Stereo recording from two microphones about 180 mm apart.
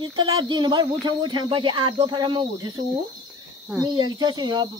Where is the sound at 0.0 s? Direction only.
25° right (ahead or behind).